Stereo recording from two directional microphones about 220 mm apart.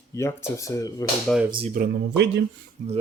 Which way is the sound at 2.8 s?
35° right (ahead or behind).